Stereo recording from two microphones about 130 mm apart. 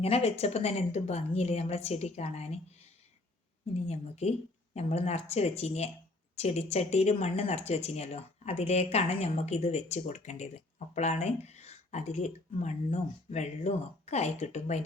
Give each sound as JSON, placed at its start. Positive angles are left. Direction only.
{"t": 0.0, "sound": "a woman's voice", "side_deg": 50}
{"t": 3.8, "sound": "speech", "side_deg": 55}